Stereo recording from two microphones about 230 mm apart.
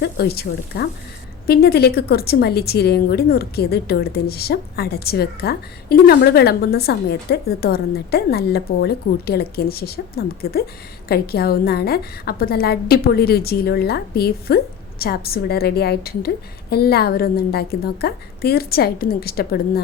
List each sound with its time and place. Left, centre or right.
0.0 s a woman's voice: left